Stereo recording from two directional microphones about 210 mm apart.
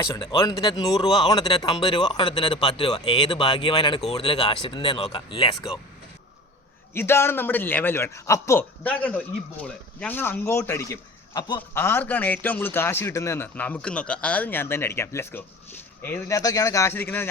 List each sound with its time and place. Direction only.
0.2 s a man's voice: 20° left (ahead or behind)
6.9 s a man's voice: 10° left (ahead or behind)